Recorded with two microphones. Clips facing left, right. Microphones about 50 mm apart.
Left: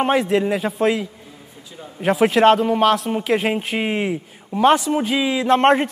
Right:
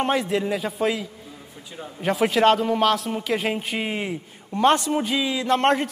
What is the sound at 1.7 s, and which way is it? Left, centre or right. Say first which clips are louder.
Speech: right 1 dB; centre.